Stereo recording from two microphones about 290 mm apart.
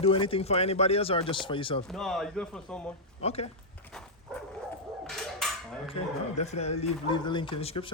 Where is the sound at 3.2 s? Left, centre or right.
Left.